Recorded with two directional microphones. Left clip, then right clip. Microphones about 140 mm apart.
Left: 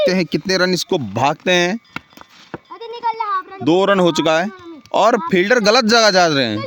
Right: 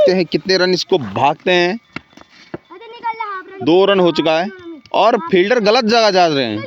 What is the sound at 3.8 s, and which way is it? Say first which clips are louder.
Speech: right 2 dB; 90° left.